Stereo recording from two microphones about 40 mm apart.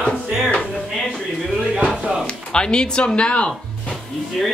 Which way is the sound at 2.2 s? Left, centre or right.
Left.